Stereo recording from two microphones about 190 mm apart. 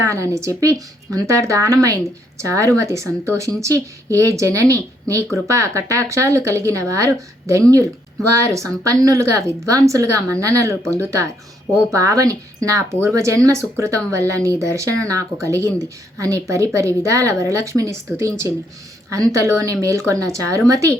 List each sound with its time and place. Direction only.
0.0 s a woman's voice: 15° right (ahead or behind)